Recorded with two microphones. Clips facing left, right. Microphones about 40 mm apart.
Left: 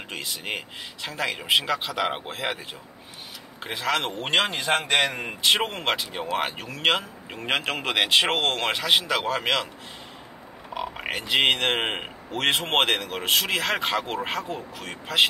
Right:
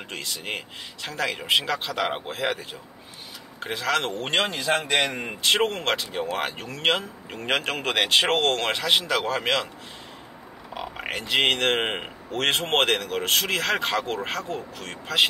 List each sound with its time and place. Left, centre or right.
0.1 s a man's voice: centre
3.6 s a man's voice: centre
4.5 s a man's voice: left
5.1 s a man's voice: centre
10.7 s a sound: centre
11.1 s a man's voice: centre